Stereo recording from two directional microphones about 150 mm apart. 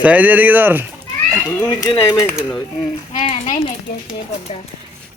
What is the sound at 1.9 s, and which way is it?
Speech, 35° left (ahead or behind).